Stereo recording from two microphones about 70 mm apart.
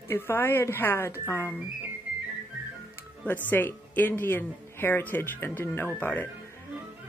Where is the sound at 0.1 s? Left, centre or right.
Left.